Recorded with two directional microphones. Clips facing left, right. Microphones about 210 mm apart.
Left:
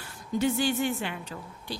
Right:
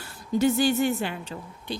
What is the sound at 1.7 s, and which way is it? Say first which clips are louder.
Speech: right 4 dB; 20° right (ahead or behind).